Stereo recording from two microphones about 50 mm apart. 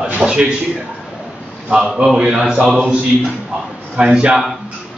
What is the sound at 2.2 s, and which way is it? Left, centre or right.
Speech, centre.